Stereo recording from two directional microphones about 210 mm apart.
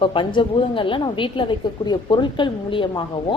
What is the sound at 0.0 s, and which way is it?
A woman's voice, 25° left (ahead or behind).